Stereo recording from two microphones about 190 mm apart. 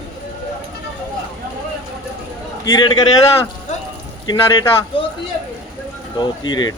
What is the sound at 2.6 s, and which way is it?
A man's voice, 25° left (ahead or behind).